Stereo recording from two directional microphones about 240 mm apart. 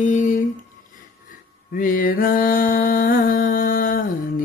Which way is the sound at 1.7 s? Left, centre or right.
Left.